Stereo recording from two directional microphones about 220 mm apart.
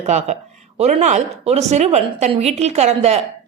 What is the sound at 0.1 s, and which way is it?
A woman's voice, 30° right (ahead or behind).